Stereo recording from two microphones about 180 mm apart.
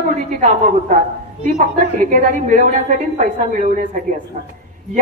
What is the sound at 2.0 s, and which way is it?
A woman's voice, 45° right (ahead or behind).